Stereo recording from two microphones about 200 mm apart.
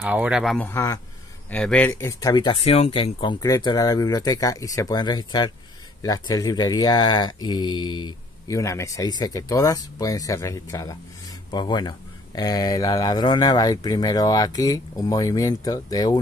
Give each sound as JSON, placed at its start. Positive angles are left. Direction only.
{"t": 0.0, "sound": "speech", "side_deg": -5}
{"t": 0.6, "sound": "speech", "side_deg": 15}
{"t": 1.5, "sound": "speech", "side_deg": 5}